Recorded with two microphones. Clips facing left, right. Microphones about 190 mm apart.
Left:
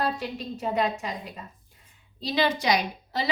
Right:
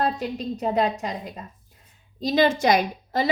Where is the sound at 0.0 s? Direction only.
40° right (ahead or behind).